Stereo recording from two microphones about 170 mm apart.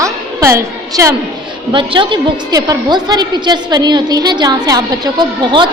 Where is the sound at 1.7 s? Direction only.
30° right (ahead or behind).